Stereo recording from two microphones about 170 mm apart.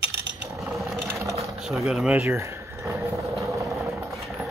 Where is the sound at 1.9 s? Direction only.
5° right (ahead or behind).